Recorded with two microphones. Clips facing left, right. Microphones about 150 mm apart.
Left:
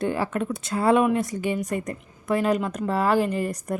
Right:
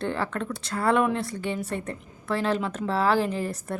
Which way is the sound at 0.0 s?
15° left (ahead or behind).